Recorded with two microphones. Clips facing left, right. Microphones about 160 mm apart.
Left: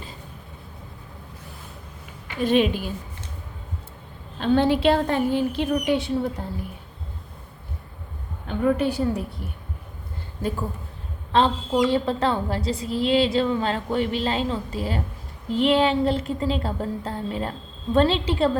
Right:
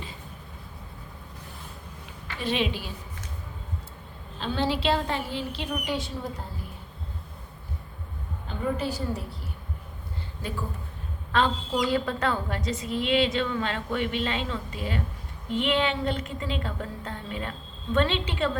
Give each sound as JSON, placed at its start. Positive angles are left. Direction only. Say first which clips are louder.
{"t": 2.4, "sound": "a woman's voice", "louder": "left 8 dB", "side_deg": 50}
{"t": 4.4, "sound": "a woman's voice", "louder": "left 8 dB", "side_deg": 55}
{"t": 5.7, "sound": "a woman's voice", "louder": "left 6 dB", "side_deg": 60}
{"t": 8.4, "sound": "a woman's voice", "louder": "left 7 dB", "side_deg": 60}
{"t": 11.3, "sound": "a woman's voice", "louder": "left 5 dB", "side_deg": 30}